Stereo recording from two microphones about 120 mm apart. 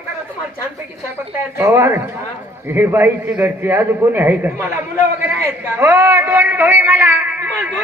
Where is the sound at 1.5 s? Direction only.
20° right (ahead or behind).